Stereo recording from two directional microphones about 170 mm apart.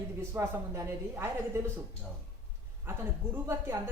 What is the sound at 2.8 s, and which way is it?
Speech, 15° right (ahead or behind).